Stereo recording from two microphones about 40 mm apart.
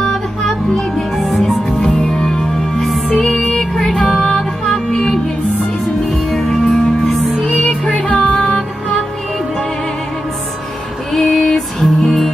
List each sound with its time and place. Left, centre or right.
0.0 s music: centre
1.1 s music: centre
1.7 s music: left
6.0 s music: centre
7.4 s music: centre
8.1 s music: left
11.1 s music: centre